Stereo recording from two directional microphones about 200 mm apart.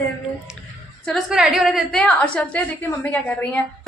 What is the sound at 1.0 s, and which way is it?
A woman's voice, centre (ahead or behind).